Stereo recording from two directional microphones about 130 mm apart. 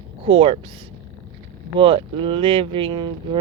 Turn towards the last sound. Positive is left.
turn(degrees=-40)  # may be behind; listen again after turning